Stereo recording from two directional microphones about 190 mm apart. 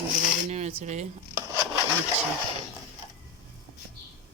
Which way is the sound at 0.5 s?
35° right (ahead or behind).